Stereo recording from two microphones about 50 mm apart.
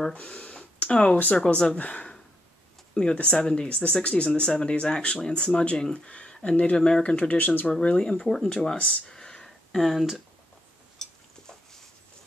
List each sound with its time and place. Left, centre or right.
0.1 s a sound: left
0.7 s speech: left
7.3 s speech: left
8.0 s speech: centre
8.8 s a sound: centre
9.8 s speech: centre